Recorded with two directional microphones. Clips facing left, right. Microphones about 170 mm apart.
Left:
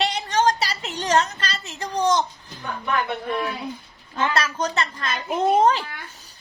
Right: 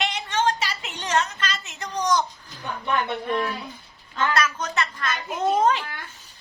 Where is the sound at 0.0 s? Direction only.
35° left (ahead or behind).